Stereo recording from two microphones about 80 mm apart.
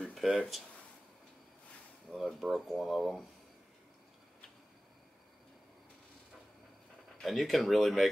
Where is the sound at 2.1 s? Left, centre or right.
Centre.